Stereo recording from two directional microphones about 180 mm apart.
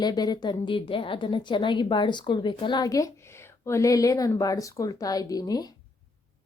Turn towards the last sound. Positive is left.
turn(degrees=20)  # may be behind; listen again after turning